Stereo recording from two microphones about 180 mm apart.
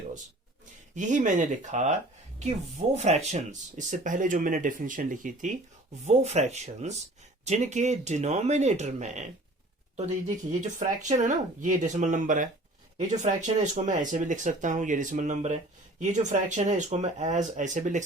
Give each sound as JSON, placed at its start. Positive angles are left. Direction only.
{"t": 0.9, "sound": "speech", "side_deg": -45}
{"t": 10.2, "sound": "speech", "side_deg": -45}